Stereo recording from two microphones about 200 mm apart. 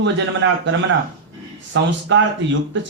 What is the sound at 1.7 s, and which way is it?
Speech, 65° right (ahead or behind).